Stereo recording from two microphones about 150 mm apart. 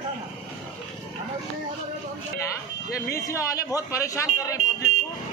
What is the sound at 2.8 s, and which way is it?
Speech, 25° left (ahead or behind).